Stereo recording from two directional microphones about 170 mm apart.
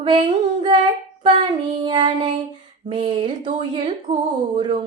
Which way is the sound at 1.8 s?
25° right (ahead or behind).